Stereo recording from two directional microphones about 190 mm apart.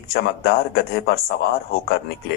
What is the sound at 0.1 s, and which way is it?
Speech, 55° left (ahead or behind).